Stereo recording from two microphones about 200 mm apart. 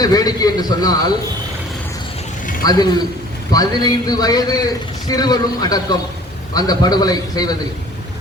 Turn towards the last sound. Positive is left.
turn(degrees=20)  # may be behind; listen again after turning